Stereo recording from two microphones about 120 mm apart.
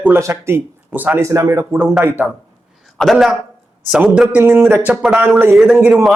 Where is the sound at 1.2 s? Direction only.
25° right (ahead or behind).